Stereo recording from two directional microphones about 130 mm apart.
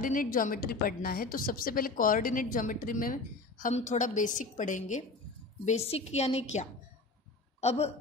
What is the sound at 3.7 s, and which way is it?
A woman's voice, 70° left (ahead or behind).